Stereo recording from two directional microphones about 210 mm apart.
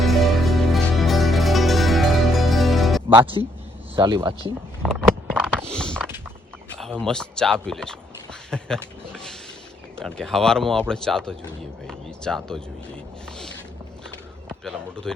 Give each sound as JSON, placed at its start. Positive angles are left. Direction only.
{"t": 0.0, "sound": "music", "side_deg": 0}
{"t": 3.9, "sound": "speech", "side_deg": -20}
{"t": 4.8, "sound": "a sound", "side_deg": 5}
{"t": 7.0, "sound": "speech", "side_deg": 5}
{"t": 14.6, "sound": "speech", "side_deg": 0}